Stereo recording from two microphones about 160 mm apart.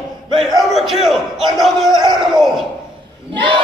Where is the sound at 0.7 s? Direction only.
Centre (ahead or behind).